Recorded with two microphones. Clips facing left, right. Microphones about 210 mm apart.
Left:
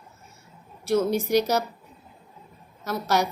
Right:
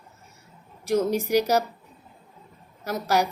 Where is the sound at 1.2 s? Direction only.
10° right (ahead or behind).